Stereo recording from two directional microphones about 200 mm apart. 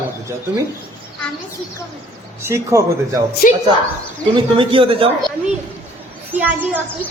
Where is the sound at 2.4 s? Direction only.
15° right (ahead or behind).